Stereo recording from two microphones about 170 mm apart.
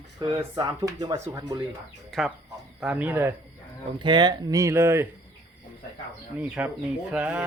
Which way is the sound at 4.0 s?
25° right (ahead or behind).